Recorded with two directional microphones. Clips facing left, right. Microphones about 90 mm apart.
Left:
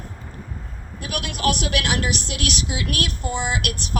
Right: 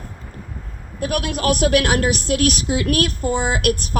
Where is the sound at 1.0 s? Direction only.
40° right (ahead or behind).